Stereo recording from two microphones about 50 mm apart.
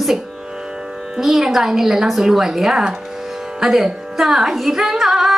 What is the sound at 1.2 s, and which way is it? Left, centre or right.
Singing, centre.